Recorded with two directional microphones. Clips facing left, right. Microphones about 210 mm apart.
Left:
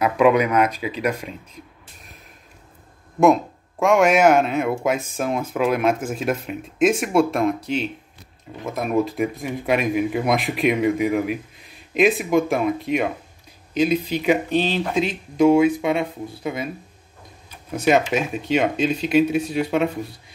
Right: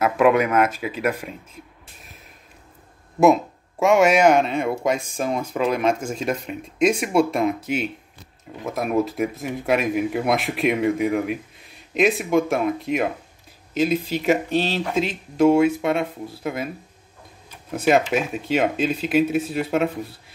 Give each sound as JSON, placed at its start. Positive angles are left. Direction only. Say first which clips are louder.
{"t": 0.0, "sound": "speech", "louder": "left 1 dB", "side_deg": 0}
{"t": 3.8, "sound": "speech", "louder": "even", "side_deg": 0}
{"t": 17.8, "sound": "speech", "louder": "even", "side_deg": -5}